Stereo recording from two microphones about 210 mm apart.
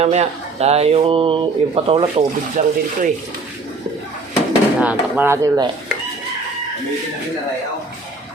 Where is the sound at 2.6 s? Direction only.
40° right (ahead or behind).